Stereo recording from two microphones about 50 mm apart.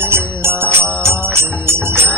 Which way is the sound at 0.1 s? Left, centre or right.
Right.